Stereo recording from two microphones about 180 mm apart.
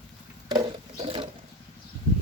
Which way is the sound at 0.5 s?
30° right (ahead or behind).